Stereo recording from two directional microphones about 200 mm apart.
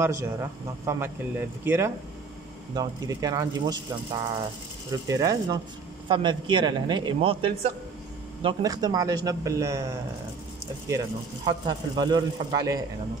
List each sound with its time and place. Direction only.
0.0 s speech: 15° right (ahead or behind)
11.4 s speech: 20° right (ahead or behind)